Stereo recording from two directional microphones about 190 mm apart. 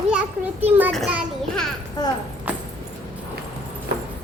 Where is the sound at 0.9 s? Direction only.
Centre (ahead or behind).